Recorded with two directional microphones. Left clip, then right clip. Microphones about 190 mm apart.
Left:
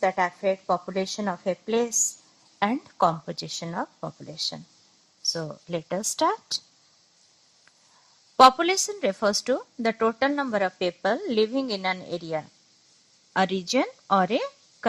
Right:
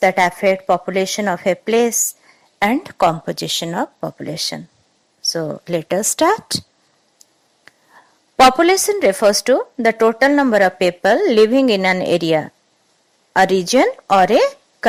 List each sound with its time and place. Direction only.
0.0 s speech: 35° right (ahead or behind)
3.0 s speech: 40° right (ahead or behind)
8.4 s speech: 40° right (ahead or behind)
13.7 s speech: 40° right (ahead or behind)
14.3 s a sound: 40° right (ahead or behind)